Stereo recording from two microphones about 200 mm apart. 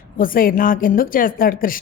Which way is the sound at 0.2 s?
45° left (ahead or behind).